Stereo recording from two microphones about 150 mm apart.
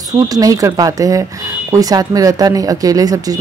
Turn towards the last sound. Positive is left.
turn(degrees=-25)  # may be behind; listen again after turning